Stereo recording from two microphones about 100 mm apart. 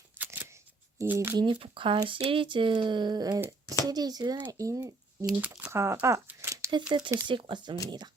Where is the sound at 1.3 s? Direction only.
55° right (ahead or behind); by 4.8 s 35° right (ahead or behind).